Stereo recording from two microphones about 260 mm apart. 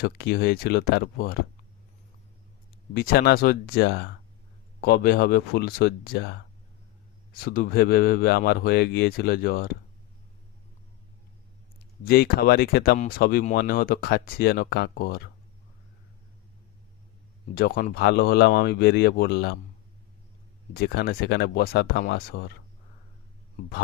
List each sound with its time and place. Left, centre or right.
0.0 s speech: left
2.9 s speech: left
12.0 s speech: left
17.6 s speech: left
20.7 s speech: left